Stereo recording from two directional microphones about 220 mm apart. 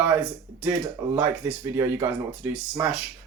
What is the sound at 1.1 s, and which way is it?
Speech, 10° right (ahead or behind).